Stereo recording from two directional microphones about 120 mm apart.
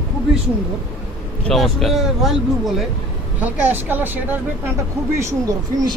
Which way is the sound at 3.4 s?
15° right (ahead or behind).